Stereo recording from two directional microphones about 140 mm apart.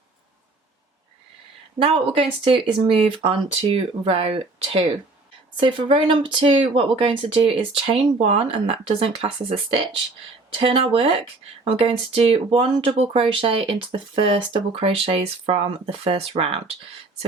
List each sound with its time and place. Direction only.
1.8 s speech: 40° right (ahead or behind)